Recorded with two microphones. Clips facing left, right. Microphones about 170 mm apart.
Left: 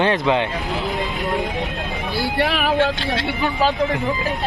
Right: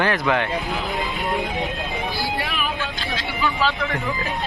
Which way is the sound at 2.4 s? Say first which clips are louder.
Left 9 dB; 70° left (ahead or behind).